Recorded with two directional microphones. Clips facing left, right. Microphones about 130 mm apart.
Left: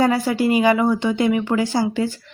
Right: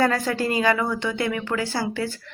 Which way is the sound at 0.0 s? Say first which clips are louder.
Left 4 dB; 15° left (ahead or behind).